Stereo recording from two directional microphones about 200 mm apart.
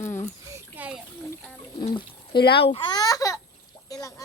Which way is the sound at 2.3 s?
55° left (ahead or behind).